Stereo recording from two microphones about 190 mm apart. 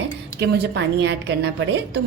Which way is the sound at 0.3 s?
60° right (ahead or behind).